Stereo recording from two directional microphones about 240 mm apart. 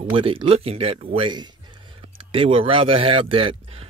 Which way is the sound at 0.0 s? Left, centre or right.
Right.